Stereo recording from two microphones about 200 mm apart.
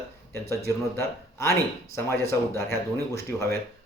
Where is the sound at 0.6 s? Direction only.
15° left (ahead or behind).